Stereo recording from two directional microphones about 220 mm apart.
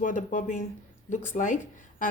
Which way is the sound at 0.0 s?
35° left (ahead or behind).